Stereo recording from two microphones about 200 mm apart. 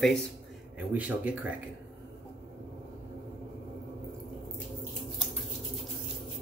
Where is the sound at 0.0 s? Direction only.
Centre (ahead or behind).